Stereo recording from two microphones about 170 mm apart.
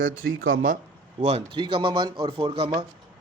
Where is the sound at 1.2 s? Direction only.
35° right (ahead or behind).